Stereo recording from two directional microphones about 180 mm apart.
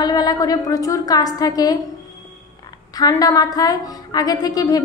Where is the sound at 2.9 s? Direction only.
20° left (ahead or behind).